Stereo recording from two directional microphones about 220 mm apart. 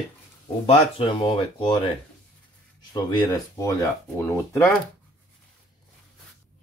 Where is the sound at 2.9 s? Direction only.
15° left (ahead or behind).